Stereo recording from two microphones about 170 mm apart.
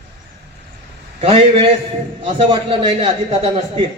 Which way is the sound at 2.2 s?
30° right (ahead or behind).